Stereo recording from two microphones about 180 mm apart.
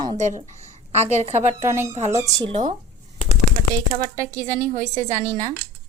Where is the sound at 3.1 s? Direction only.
35° left (ahead or behind).